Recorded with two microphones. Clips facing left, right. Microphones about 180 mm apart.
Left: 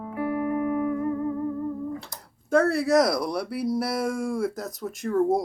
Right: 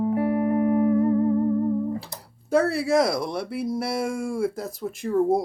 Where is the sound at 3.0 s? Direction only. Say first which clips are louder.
Even; 25° right (ahead or behind).